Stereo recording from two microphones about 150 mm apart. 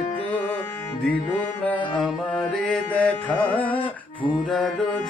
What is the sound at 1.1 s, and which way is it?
Mantra, 10° left (ahead or behind).